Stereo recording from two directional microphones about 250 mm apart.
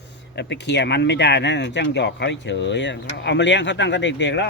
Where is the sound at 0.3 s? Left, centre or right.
Left.